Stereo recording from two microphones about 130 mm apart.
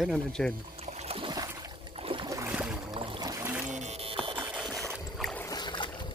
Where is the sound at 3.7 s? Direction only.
60° right (ahead or behind); by 4.4 s 45° right (ahead or behind).